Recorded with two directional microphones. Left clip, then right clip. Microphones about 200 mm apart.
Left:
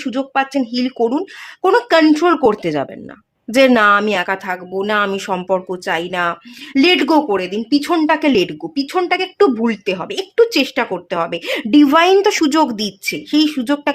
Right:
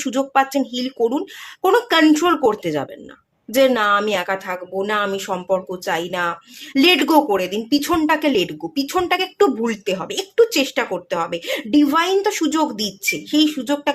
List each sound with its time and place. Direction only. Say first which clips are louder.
0.0 s speech: right 1 dB; 5° left (ahead or behind); by 8.5 s 20° left (ahead or behind)
8.7 s speech: left 2 dB; 10° left (ahead or behind)